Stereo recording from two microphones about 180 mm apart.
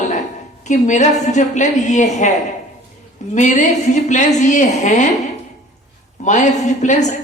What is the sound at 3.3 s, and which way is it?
Speech, 40° left (ahead or behind).